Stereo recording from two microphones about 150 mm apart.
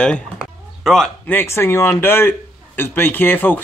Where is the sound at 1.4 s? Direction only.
15° left (ahead or behind).